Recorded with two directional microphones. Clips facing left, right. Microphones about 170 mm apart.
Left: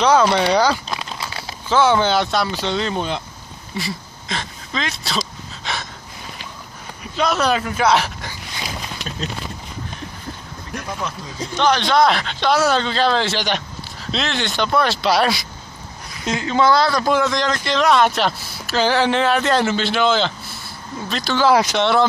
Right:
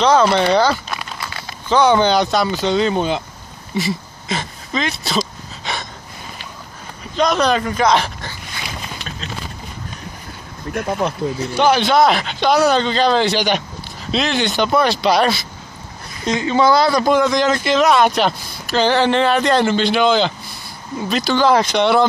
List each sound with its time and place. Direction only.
0.3 s speech: 10° left (ahead or behind)
3.7 s a sound: 5° right (ahead or behind)
7.2 s speech: 5° left (ahead or behind)
10.7 s speech: 55° right (ahead or behind)
11.5 s speech: 10° right (ahead or behind); by 21.8 s 10° left (ahead or behind)